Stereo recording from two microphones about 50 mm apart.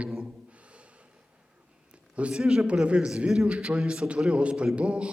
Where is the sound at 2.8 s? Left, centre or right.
Right.